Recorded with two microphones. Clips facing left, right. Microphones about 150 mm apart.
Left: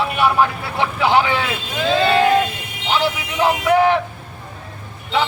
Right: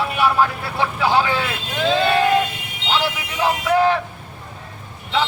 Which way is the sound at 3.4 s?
20° left (ahead or behind).